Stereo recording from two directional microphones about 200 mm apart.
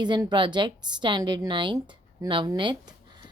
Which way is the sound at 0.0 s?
20° right (ahead or behind).